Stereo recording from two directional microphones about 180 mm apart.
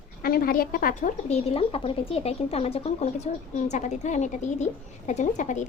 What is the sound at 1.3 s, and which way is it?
A woman's voice, 35° left (ahead or behind).